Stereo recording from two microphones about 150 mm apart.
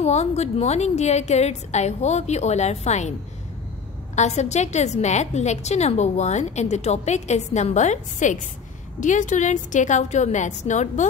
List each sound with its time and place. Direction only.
0.0 s a woman's voice: 45° left (ahead or behind)